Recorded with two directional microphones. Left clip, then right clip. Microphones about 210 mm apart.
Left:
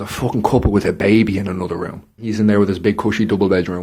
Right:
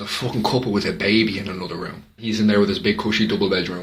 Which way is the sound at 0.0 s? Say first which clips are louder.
Left 4 dB; 60° left (ahead or behind).